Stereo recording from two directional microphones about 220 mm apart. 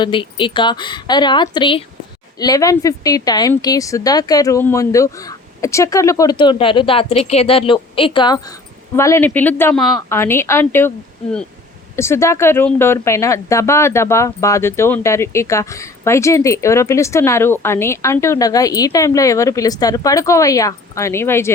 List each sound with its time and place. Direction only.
0.0 s a woman's voice: 20° left (ahead or behind)